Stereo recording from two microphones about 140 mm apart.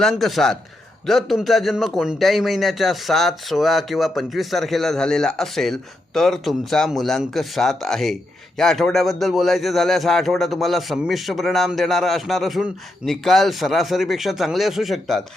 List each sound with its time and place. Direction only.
0.0 s a man's voice: centre (ahead or behind)